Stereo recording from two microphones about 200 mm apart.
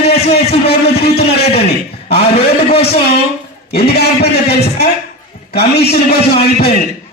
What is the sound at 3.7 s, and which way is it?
A man's voice, 55° left (ahead or behind).